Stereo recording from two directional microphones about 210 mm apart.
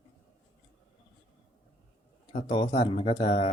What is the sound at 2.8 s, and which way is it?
Speech, 25° left (ahead or behind).